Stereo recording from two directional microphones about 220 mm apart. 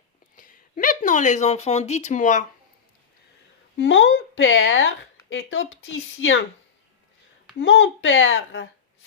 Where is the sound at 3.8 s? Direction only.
60° left (ahead or behind).